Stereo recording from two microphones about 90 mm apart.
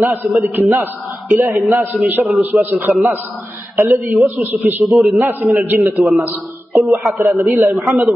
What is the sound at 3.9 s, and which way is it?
A man's voice, centre (ahead or behind).